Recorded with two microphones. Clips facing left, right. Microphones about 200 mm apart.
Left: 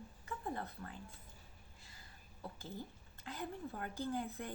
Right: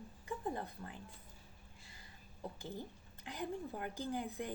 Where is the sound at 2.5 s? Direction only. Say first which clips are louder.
Right 2 dB; 15° right (ahead or behind).